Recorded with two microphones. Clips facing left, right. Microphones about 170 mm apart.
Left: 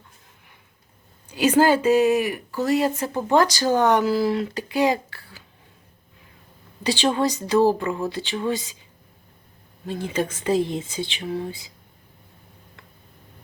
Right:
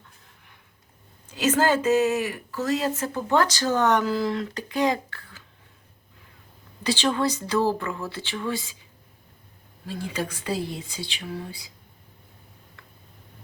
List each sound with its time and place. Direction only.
1.3 s speech: 15° left (ahead or behind)
6.8 s speech: 15° left (ahead or behind)
9.8 s speech: 25° left (ahead or behind)